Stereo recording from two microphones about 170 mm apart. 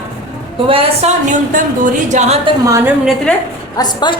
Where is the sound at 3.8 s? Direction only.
25° left (ahead or behind).